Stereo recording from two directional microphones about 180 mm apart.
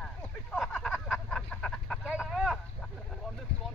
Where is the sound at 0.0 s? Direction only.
5° left (ahead or behind).